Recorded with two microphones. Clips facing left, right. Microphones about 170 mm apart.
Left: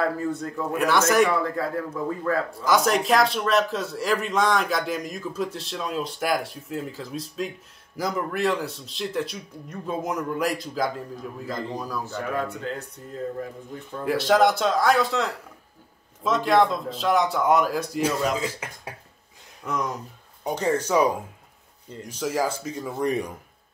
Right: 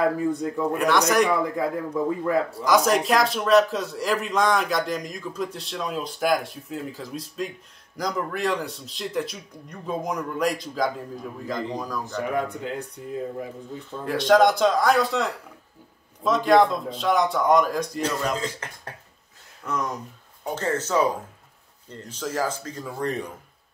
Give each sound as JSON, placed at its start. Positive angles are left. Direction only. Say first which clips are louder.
{"t": 0.0, "sound": "speech", "louder": "right 3 dB", "side_deg": -15}
{"t": 0.7, "sound": "a man's voice", "louder": "left 2 dB", "side_deg": 0}
{"t": 1.3, "sound": "speech", "louder": "right 1 dB", "side_deg": -15}
{"t": 2.6, "sound": "a man's voice", "louder": "right 1 dB", "side_deg": 0}
{"t": 12.4, "sound": "speech", "louder": "right 2 dB", "side_deg": -15}
{"t": 14.0, "sound": "a man's voice", "louder": "right 2 dB", "side_deg": 5}